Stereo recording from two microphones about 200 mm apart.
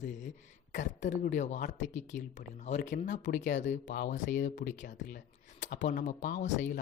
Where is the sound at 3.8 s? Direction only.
55° left (ahead or behind).